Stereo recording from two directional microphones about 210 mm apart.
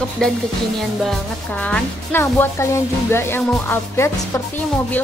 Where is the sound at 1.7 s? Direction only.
10° left (ahead or behind).